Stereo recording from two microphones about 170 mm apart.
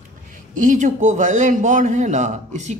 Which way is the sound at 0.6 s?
45° right (ahead or behind).